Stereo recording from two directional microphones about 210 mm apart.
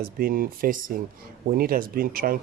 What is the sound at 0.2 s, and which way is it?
Speech, 45° right (ahead or behind).